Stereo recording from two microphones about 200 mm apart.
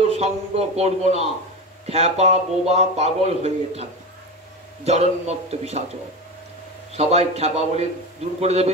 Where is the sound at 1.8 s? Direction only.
30° right (ahead or behind).